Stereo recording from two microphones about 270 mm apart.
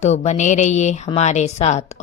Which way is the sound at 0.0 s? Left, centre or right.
Left.